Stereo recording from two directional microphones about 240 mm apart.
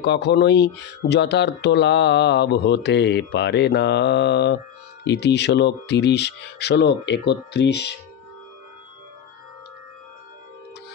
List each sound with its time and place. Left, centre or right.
0.0 s speech: left